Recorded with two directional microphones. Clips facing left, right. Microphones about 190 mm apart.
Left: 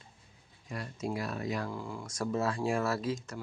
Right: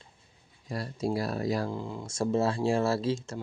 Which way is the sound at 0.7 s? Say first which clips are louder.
Right 5 dB; 35° right (ahead or behind).